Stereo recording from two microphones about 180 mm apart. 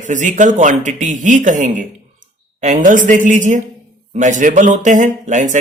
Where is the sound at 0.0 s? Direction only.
45° right (ahead or behind).